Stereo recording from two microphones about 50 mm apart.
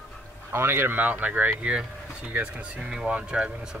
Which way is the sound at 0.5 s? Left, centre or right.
Right.